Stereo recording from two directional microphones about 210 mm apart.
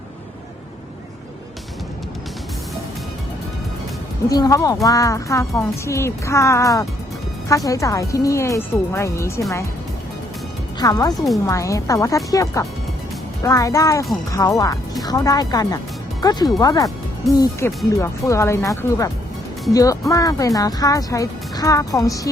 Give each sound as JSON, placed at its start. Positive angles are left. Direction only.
{"t": 4.3, "sound": "speech", "side_deg": 15}
{"t": 10.8, "sound": "speech", "side_deg": 15}